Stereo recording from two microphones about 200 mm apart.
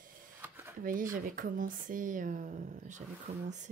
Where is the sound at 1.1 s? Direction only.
45° right (ahead or behind).